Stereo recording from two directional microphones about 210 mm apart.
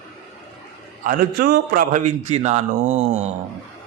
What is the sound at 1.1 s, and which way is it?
A man's voice, 45° right (ahead or behind).